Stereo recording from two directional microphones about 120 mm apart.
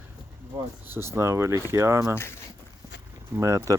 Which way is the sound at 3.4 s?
25° right (ahead or behind).